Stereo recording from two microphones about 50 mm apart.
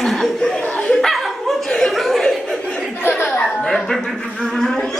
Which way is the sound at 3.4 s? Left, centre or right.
Centre.